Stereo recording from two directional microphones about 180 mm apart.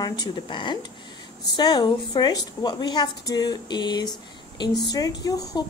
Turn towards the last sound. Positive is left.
turn(degrees=20)  # may be behind; listen again after turning